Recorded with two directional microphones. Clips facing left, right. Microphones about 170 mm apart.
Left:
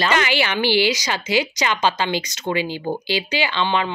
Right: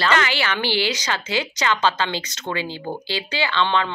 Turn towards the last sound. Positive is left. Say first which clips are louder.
# even
turn(degrees=15)  # may be behind; listen again after turning